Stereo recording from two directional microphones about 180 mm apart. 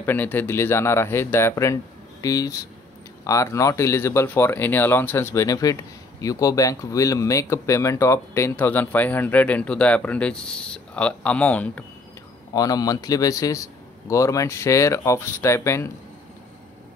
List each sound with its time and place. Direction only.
0.0 s speech: 10° left (ahead or behind)
12.5 s speech: 20° left (ahead or behind)